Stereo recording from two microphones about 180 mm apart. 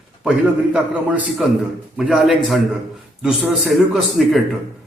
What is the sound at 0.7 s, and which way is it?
Speech, 5° right (ahead or behind).